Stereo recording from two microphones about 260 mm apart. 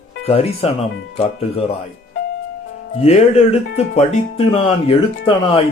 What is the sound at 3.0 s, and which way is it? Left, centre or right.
Speech, left.